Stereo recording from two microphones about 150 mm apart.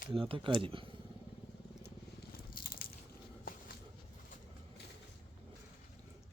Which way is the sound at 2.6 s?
80° left.